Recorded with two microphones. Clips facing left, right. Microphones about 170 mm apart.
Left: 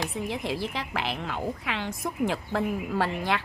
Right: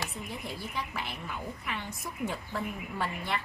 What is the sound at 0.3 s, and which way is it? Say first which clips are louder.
A woman's voice: left 8 dB; 90° left.